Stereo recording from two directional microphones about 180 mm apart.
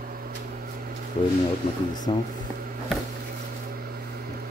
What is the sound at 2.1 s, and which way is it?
Speech, 25° left (ahead or behind).